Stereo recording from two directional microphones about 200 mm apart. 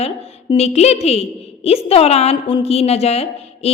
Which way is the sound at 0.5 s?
30° left (ahead or behind).